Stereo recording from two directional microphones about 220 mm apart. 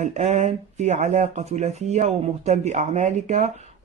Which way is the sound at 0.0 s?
30° right (ahead or behind).